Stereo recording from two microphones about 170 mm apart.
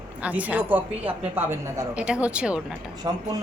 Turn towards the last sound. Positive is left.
turn(degrees=-25)  # may be behind; listen again after turning